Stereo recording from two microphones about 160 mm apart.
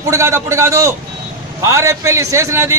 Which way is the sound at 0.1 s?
15° right (ahead or behind).